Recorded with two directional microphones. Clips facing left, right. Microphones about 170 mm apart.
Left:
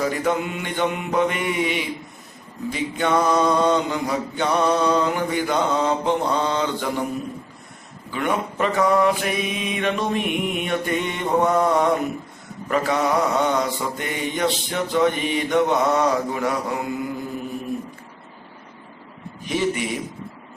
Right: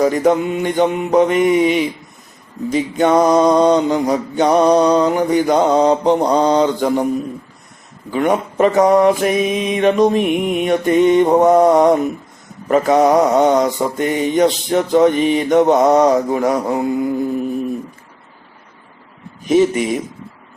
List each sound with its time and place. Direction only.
0.0 s mantra: 40° right (ahead or behind)
8.1 s mantra: 40° right (ahead or behind)
19.5 s mantra: 45° right (ahead or behind)